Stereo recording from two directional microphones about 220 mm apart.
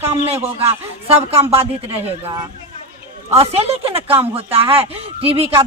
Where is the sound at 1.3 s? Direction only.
25° right (ahead or behind).